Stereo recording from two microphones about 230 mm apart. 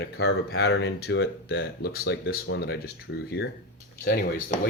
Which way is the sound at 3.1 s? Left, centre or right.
Left.